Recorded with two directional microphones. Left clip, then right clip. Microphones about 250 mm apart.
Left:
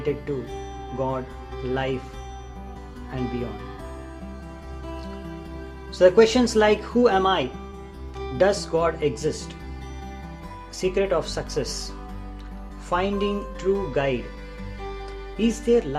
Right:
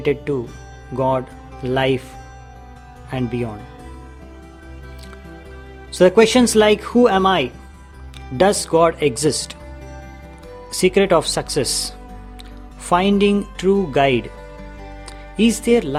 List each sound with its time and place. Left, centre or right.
0.9 s speech: right
3.1 s speech: right
6.0 s speech: right
10.8 s speech: right
12.9 s speech: right
15.4 s speech: right